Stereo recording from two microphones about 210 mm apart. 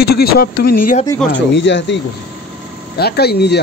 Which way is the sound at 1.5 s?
60° left (ahead or behind).